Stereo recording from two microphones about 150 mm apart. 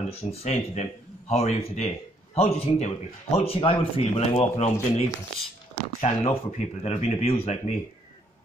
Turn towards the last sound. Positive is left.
turn(degrees=45)  # may be behind; listen again after turning